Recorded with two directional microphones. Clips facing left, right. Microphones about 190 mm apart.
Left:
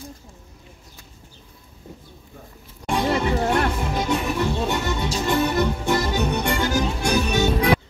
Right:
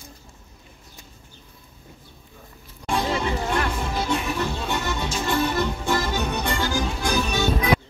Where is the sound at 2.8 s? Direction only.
15° left (ahead or behind).